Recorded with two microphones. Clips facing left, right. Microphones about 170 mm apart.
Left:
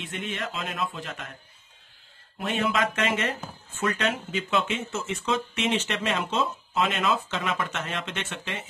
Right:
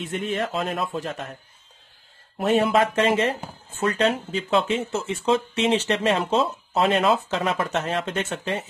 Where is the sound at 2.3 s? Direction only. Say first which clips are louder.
Right 7 dB; 40° right (ahead or behind).